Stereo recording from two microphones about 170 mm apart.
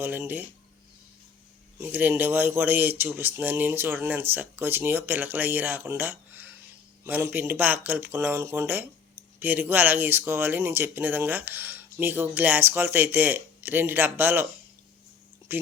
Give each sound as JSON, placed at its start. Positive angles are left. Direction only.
{"t": 0.0, "sound": "speech", "side_deg": -10}
{"t": 1.8, "sound": "speech", "side_deg": -10}